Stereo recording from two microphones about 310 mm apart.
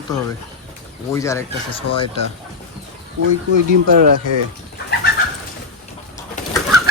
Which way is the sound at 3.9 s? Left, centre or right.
Right.